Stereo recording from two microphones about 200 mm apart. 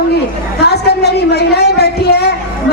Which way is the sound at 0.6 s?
55° left (ahead or behind).